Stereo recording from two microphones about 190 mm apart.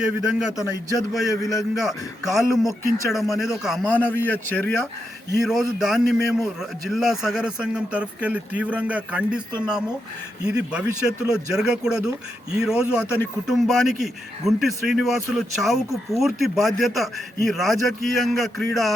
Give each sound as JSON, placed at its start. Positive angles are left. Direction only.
{"t": 0.0, "sound": "a man's voice", "side_deg": -5}
{"t": 0.5, "sound": "a man's voice", "side_deg": 15}
{"t": 1.7, "sound": "a man's voice", "side_deg": 0}
{"t": 3.8, "sound": "a man's voice", "side_deg": 10}
{"t": 5.4, "sound": "a man's voice", "side_deg": 0}